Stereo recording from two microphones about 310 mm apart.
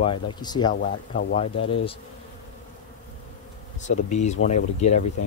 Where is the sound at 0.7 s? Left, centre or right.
Left.